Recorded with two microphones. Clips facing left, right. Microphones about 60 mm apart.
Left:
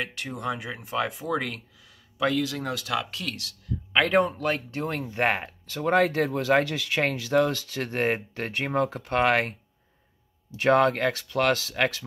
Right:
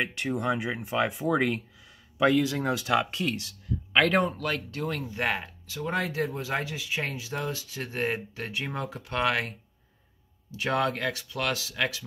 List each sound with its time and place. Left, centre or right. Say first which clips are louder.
0.0 s speech: right 3 dB; centre
3.9 s a man's voice: left 1 dB; centre
4.4 s speech: left 3 dB; left